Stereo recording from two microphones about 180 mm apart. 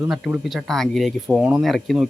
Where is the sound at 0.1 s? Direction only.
Centre (ahead or behind).